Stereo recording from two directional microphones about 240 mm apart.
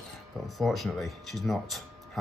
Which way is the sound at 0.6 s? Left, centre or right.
Centre.